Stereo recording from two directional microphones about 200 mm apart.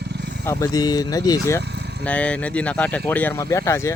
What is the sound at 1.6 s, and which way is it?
Vehicle, 55° right (ahead or behind).